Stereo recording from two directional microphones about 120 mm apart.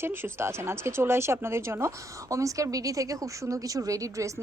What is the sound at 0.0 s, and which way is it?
Speech, 20° right (ahead or behind).